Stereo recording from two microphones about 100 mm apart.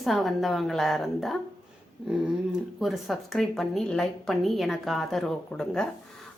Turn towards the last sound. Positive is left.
turn(degrees=5)  # may be behind; listen again after turning